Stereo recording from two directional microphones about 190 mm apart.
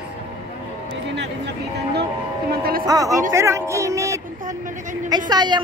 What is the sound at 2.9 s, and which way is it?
Speech, 20° right (ahead or behind).